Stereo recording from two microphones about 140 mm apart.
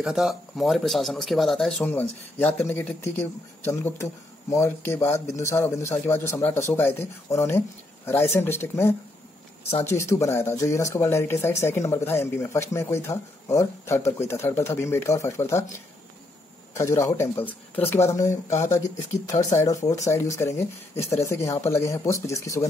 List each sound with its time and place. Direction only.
0.0 s speech: 5° right (ahead or behind); by 15.6 s 20° left (ahead or behind)
16.7 s speech: 20° left (ahead or behind)